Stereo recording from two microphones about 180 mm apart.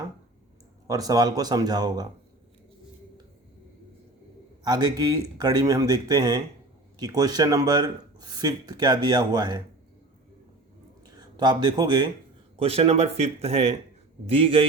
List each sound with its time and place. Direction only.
0.9 s speech: 20° right (ahead or behind)
4.6 s speech: 20° right (ahead or behind)
11.2 s speech: 25° right (ahead or behind)